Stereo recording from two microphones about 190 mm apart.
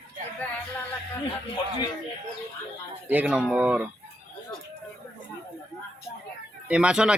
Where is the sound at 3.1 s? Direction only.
5° right (ahead or behind).